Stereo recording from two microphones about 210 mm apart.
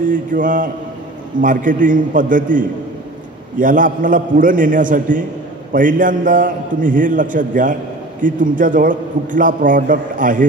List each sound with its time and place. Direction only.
0.1 s a man's voice: 40° right (ahead or behind)